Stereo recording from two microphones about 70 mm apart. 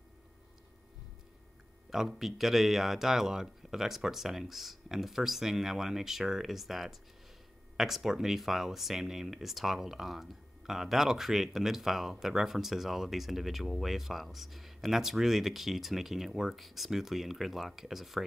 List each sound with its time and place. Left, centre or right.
1.9 s speech: centre